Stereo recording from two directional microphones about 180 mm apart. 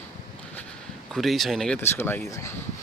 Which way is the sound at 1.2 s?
Centre (ahead or behind).